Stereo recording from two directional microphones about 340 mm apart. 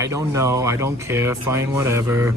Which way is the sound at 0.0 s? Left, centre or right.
Centre.